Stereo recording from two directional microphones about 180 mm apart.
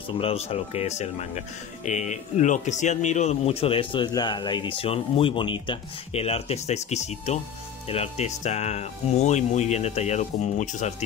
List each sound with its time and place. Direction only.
0.2 s speech: 35° left (ahead or behind)